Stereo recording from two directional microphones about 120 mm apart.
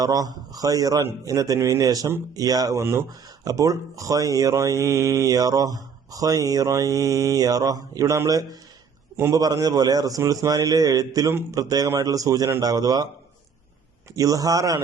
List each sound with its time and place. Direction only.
0.0 s a man's voice: 30° right (ahead or behind)
9.4 s a man's voice: 30° right (ahead or behind)
14.2 s speech: 30° right (ahead or behind)